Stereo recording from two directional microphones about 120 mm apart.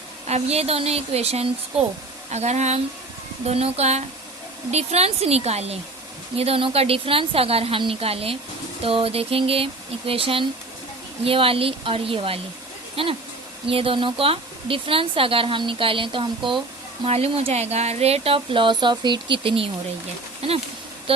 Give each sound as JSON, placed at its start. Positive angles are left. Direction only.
{"t": 0.3, "sound": "a woman's voice", "side_deg": -65}
{"t": 17.1, "sound": "speech", "side_deg": -55}